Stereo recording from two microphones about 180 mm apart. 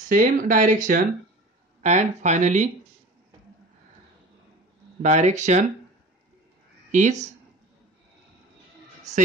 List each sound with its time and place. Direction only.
0.1 s speech: 45° right (ahead or behind)
5.0 s speech: 40° right (ahead or behind)
6.9 s speech: 40° right (ahead or behind)
9.1 s speech: 40° right (ahead or behind)